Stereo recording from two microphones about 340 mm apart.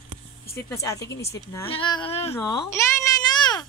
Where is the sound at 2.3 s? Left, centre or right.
Centre.